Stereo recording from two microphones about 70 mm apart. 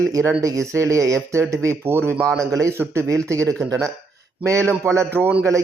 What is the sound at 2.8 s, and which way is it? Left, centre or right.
Speech, right.